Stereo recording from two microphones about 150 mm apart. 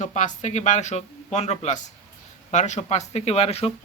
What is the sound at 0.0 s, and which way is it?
Speech, 55° left (ahead or behind).